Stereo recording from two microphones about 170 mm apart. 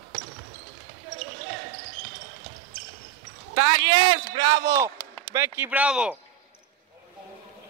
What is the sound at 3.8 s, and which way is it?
A man's voice, 30° right (ahead or behind).